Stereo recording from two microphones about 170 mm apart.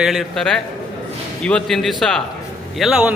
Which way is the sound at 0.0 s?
Centre (ahead or behind).